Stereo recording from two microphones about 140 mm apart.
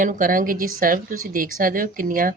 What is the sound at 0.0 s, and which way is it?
A woman's voice, 75° right (ahead or behind).